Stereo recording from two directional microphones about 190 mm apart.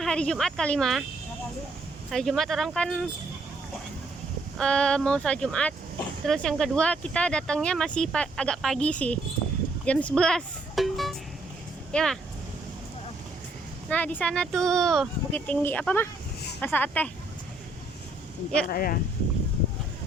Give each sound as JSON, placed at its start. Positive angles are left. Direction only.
{"t": 0.0, "sound": "speech", "side_deg": 5}
{"t": 2.0, "sound": "speech", "side_deg": 0}
{"t": 4.5, "sound": "speech", "side_deg": 5}
{"t": 9.8, "sound": "music", "side_deg": 5}
{"t": 11.9, "sound": "speech", "side_deg": 5}
{"t": 13.9, "sound": "speech", "side_deg": 10}
{"t": 18.7, "sound": "speech", "side_deg": 50}